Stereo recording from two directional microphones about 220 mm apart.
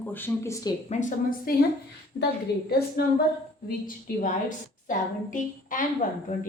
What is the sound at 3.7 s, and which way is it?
A woman's voice, 35° left (ahead or behind).